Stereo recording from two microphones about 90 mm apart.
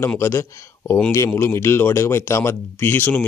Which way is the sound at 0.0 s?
25° left (ahead or behind).